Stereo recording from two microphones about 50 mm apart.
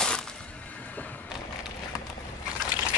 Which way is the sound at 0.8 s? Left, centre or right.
Left.